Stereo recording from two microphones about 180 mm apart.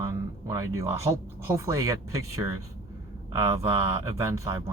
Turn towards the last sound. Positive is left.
turn(degrees=-15)  # may be behind; listen again after turning